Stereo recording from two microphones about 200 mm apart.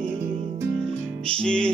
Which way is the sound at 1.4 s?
5° left (ahead or behind).